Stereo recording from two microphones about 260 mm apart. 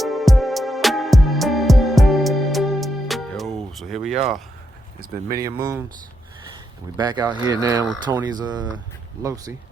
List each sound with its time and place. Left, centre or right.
0.0 s music: centre
5.4 s speech: centre
6.9 s speech: centre